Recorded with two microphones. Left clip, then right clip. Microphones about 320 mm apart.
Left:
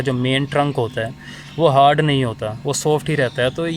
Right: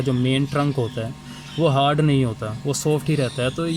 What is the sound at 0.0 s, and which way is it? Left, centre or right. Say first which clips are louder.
Speech: left 3 dB; left.